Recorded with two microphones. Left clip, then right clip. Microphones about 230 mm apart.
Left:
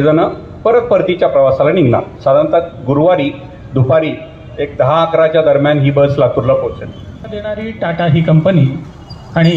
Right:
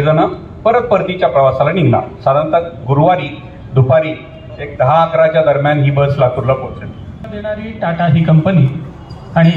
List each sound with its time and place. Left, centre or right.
0.0 s a man's voice: left